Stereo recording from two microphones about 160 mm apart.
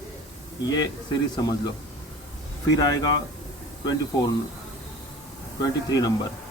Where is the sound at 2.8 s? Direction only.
25° left (ahead or behind).